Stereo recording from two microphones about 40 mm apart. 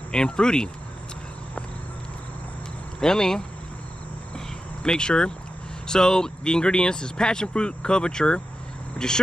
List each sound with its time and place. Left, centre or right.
0.1 s speech: left
3.0 s speech: centre
4.8 s speech: left